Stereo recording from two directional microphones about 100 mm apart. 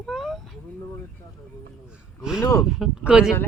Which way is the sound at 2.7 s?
5° right (ahead or behind).